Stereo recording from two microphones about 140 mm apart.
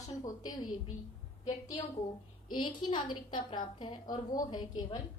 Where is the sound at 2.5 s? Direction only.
35° left (ahead or behind).